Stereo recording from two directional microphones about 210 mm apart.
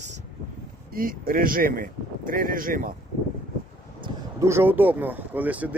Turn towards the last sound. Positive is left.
turn(degrees=-5)  # may be behind; listen again after turning